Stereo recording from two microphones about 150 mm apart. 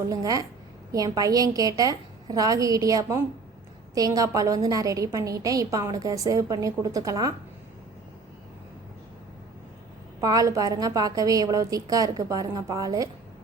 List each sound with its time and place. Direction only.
0.1 s a woman's voice: 25° right (ahead or behind)
10.2 s a woman's voice: 25° right (ahead or behind)